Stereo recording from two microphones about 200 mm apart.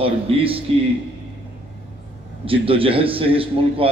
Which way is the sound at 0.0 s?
25° right (ahead or behind).